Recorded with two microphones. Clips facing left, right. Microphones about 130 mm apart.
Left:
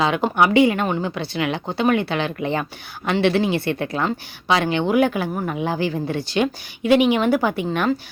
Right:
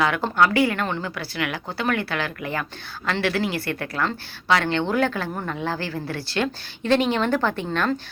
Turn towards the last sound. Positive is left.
turn(degrees=15)  # may be behind; listen again after turning